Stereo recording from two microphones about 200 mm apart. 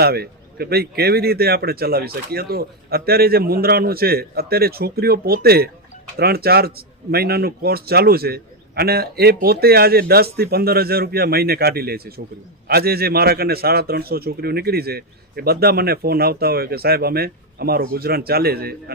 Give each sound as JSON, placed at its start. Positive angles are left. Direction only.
{"t": 0.0, "sound": "a man's voice", "side_deg": -50}